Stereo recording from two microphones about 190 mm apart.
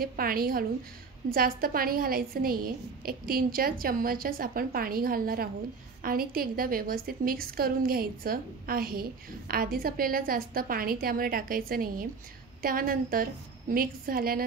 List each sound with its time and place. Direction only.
0.0 s a woman's voice: 50° right (ahead or behind)